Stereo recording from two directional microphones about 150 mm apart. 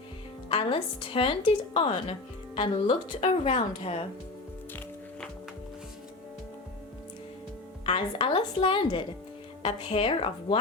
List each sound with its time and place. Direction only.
0.5 s a woman's voice: 35° left (ahead or behind)
7.9 s a woman's voice: 40° left (ahead or behind)